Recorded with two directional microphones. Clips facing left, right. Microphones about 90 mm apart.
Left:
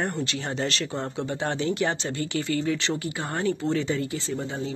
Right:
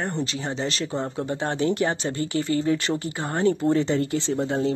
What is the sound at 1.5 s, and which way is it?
Speech, 45° right (ahead or behind).